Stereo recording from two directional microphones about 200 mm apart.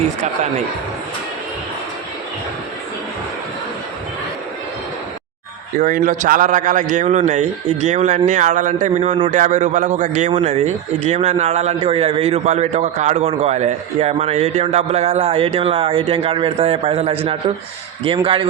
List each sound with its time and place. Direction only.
5.8 s a man's voice: 40° right (ahead or behind)